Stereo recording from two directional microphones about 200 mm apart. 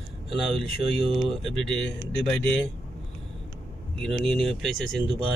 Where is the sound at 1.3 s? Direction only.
Centre (ahead or behind).